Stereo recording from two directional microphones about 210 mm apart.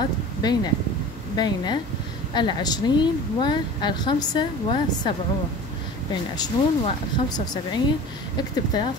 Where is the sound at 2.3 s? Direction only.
20° left (ahead or behind).